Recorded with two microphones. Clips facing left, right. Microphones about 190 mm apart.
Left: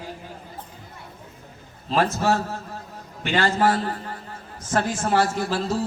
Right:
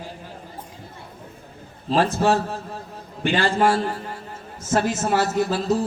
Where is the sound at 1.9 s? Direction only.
30° right (ahead or behind).